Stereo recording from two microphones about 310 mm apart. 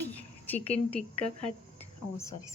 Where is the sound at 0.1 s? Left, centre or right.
Centre.